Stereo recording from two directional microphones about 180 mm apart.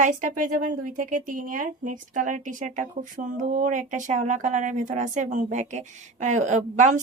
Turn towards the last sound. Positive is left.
turn(degrees=-45)  # may be behind; listen again after turning